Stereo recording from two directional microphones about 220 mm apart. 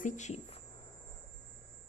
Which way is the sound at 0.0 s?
30° left (ahead or behind).